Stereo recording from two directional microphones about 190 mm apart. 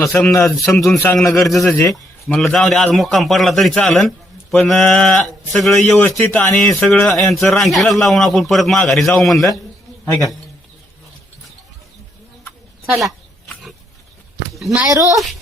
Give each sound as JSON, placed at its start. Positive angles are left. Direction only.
{"t": 0.0, "sound": "a man's voice", "side_deg": 10}
{"t": 1.5, "sound": "a man's voice", "side_deg": 5}
{"t": 12.8, "sound": "dog", "side_deg": 0}
{"t": 14.5, "sound": "speech", "side_deg": 0}
{"t": 14.8, "sound": "speech", "side_deg": -15}